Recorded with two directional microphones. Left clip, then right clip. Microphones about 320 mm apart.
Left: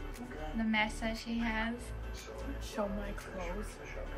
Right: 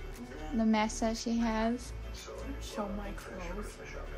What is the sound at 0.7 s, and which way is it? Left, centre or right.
A woman's voice, centre.